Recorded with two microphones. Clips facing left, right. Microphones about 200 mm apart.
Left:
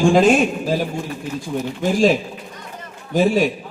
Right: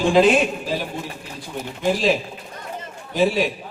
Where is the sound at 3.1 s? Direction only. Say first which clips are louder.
Left 3 dB; 45° left (ahead or behind).